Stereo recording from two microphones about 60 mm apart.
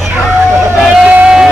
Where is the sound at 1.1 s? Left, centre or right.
Centre.